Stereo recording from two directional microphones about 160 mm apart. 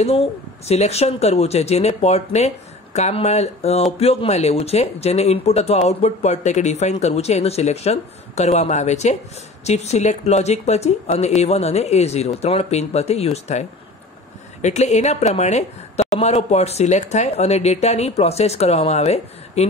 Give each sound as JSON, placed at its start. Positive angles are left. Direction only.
{"t": 0.0, "sound": "a woman's voice", "side_deg": 40}